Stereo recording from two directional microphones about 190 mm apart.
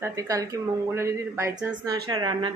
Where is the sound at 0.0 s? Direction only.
15° right (ahead or behind).